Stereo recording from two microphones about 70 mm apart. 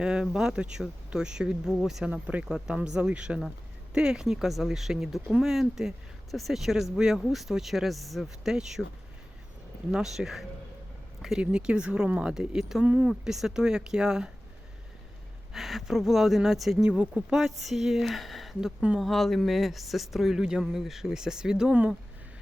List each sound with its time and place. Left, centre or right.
0.0 s speech: centre
2.0 s speech: centre
9.9 s speech: centre
12.8 s speech: right
13.2 s speech: centre
15.5 s speech: centre
16.9 s speech: centre